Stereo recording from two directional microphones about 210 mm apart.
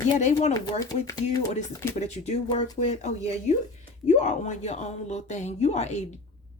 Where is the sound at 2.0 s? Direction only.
30° left (ahead or behind).